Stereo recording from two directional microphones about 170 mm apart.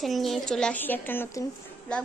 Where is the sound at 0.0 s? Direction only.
Centre (ahead or behind).